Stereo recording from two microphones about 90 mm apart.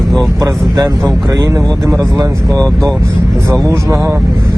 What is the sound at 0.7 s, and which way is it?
Speech, 45° right (ahead or behind).